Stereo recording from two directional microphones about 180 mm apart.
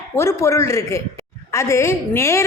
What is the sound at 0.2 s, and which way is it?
Speech, 15° left (ahead or behind).